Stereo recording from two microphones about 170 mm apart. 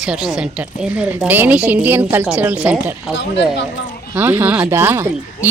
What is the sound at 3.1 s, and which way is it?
Speech, 90° left.